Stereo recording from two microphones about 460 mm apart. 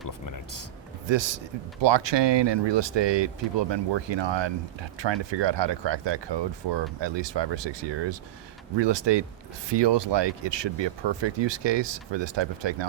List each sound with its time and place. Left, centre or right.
0.1 s speech: left
1.0 s a man's voice: right